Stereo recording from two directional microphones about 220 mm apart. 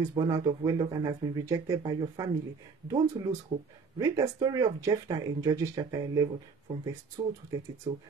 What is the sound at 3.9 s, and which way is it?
Speech, 15° right (ahead or behind).